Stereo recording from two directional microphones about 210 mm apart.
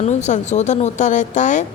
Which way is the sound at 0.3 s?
35° left (ahead or behind).